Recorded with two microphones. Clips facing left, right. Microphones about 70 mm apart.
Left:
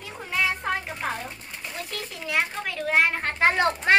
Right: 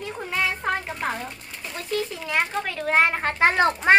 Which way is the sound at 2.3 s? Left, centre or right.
Centre.